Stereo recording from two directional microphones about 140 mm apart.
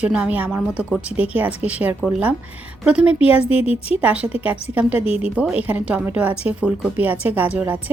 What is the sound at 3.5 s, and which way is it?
Speech, 45° left (ahead or behind).